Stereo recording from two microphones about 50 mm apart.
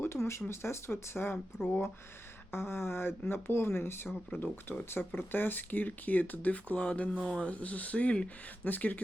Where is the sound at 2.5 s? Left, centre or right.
Left; by 7.5 s centre.